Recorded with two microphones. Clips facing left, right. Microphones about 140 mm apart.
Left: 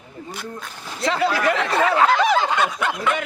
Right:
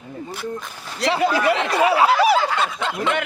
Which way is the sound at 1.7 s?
10° right (ahead or behind).